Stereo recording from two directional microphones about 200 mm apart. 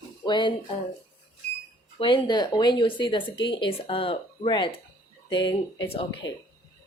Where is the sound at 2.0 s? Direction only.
25° left (ahead or behind).